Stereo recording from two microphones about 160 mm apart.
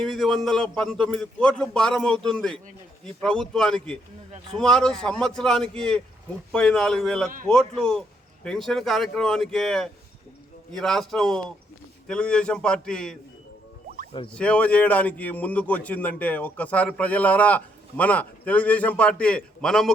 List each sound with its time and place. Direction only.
0.0 s a man's voice: centre (ahead or behind)
14.3 s a man's voice: 5° left (ahead or behind)